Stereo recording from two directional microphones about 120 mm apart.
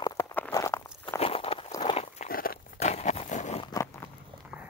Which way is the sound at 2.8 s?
70° left (ahead or behind).